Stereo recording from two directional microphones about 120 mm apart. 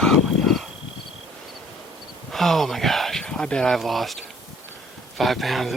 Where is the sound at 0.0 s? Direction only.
Centre (ahead or behind).